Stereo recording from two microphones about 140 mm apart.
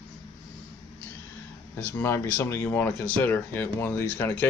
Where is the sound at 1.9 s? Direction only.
15° left (ahead or behind).